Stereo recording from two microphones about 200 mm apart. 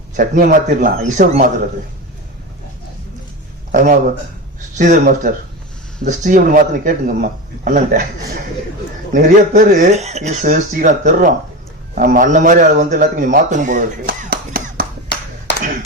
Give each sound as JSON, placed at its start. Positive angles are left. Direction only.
{"t": 0.2, "sound": "a man's voice", "side_deg": -40}
{"t": 3.7, "sound": "a man's voice", "side_deg": -40}
{"t": 9.1, "sound": "a man's voice", "side_deg": -40}